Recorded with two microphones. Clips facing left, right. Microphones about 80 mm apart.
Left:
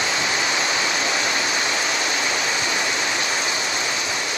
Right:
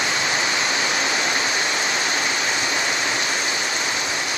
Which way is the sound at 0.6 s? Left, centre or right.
Right.